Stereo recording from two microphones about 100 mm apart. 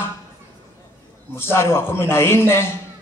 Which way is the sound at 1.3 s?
25° left (ahead or behind).